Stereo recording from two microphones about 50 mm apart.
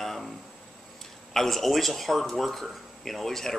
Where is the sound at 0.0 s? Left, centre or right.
Centre.